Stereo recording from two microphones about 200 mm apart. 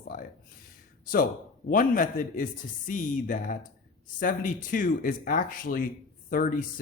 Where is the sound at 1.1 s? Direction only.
45° left (ahead or behind).